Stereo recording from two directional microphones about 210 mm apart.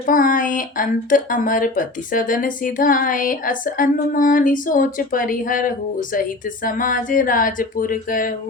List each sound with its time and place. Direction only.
0.0 s a woman's voice: 40° left (ahead or behind)